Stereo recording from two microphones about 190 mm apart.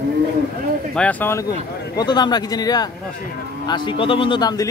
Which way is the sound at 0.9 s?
10° left (ahead or behind).